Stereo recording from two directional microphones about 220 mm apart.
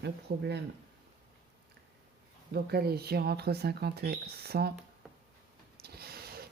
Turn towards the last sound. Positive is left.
turn(degrees=-45)  # may be behind; listen again after turning